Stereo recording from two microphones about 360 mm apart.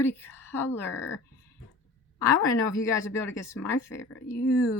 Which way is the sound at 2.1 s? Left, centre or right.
Centre.